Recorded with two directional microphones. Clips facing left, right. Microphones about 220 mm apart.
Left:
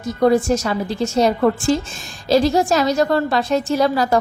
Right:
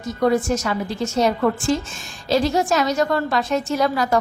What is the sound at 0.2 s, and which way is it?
A woman's voice, 30° left (ahead or behind).